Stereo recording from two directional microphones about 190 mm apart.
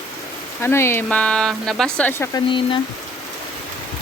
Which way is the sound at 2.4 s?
25° left (ahead or behind).